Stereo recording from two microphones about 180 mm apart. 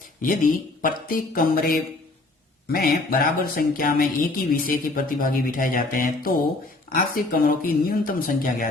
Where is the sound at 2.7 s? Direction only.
55° left (ahead or behind).